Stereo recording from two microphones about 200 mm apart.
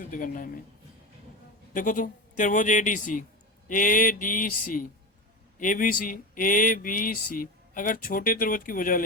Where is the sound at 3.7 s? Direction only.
40° left (ahead or behind).